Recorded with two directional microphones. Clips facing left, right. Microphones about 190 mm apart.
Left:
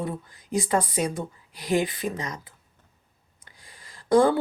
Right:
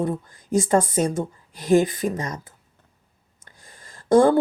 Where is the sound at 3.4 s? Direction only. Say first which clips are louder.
Right 3 dB; 45° right (ahead or behind).